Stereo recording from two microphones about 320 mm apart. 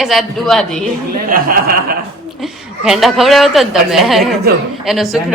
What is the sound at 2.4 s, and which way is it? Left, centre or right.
A woman's voice, centre.